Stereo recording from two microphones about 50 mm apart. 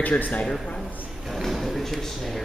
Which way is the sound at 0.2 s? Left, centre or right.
Left.